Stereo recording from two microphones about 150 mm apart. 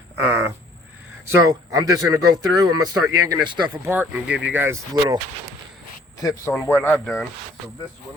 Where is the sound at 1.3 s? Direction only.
20° right (ahead or behind).